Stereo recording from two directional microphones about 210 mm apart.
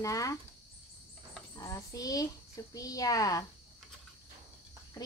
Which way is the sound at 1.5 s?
15° left (ahead or behind).